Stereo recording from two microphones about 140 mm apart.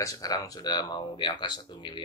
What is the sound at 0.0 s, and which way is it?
Speech, 25° left (ahead or behind).